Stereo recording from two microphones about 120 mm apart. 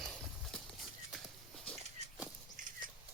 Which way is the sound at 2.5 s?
90° right.